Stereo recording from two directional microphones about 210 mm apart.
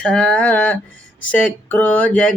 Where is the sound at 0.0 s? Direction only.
5° left (ahead or behind).